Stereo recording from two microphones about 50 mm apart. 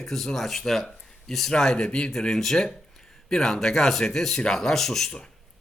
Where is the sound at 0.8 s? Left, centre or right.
Centre.